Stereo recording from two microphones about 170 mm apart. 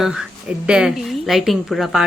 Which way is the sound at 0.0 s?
5° right (ahead or behind).